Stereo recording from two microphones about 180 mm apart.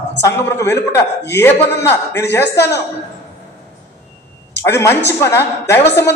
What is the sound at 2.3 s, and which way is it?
Speech, 15° left (ahead or behind).